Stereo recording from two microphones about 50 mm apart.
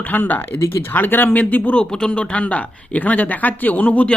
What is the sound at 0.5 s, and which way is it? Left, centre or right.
Speech, left.